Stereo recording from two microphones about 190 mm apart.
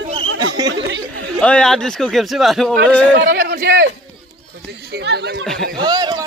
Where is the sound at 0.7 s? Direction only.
75° right (ahead or behind).